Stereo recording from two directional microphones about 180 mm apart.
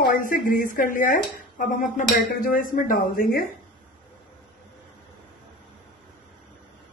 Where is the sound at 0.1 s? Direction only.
50° left (ahead or behind).